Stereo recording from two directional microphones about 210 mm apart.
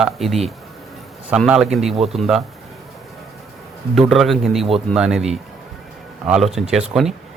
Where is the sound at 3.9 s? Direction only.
Centre (ahead or behind).